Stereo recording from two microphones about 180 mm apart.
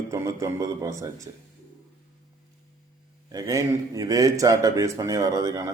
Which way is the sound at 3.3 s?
20° right (ahead or behind).